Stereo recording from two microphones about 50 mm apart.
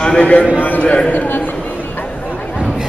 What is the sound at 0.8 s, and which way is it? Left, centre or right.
Speech, left.